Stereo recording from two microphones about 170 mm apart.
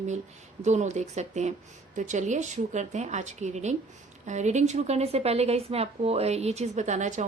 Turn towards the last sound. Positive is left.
turn(degrees=-45)  # may be behind; listen again after turning